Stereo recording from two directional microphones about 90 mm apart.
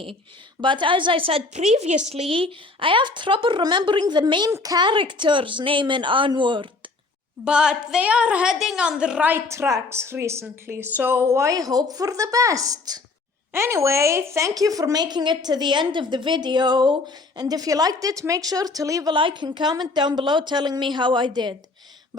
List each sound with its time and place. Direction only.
0.6 s a woman's voice: 65° right (ahead or behind)
4.6 s a woman's voice: 45° right (ahead or behind)
4.9 s a woman's voice: 60° right (ahead or behind)
7.4 s a woman's voice: 10° right (ahead or behind)
9.3 s a woman's voice: 30° right (ahead or behind)
13.5 s a woman's voice: 30° right (ahead or behind)
19.1 s a woman's voice: 60° right (ahead or behind)